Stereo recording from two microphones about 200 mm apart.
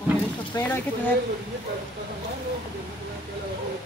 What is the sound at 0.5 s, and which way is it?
Speech, 20° left (ahead or behind).